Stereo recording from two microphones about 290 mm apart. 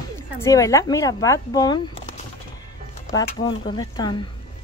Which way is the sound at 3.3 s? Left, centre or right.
Centre.